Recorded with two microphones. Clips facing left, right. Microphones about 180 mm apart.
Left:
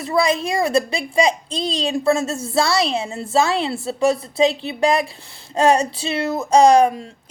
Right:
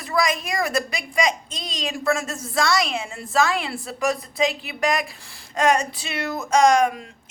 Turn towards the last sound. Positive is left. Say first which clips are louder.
# left 5 dB
turn(degrees=30)  # may be behind; listen again after turning